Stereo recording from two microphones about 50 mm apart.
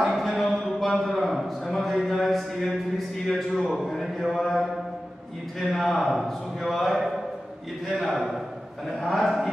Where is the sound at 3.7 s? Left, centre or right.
Centre.